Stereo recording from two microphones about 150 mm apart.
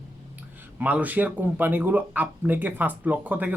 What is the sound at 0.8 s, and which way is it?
Speech, 10° right (ahead or behind).